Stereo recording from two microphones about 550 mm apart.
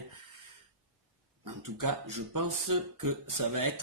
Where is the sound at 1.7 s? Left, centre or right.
Right.